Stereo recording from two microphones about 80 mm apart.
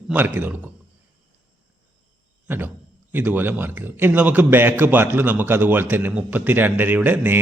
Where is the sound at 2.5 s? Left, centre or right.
Right.